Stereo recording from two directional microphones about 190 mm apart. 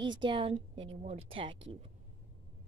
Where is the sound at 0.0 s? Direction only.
25° right (ahead or behind).